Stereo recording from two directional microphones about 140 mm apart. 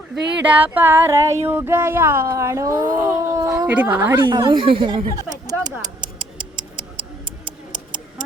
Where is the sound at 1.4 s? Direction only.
15° right (ahead or behind).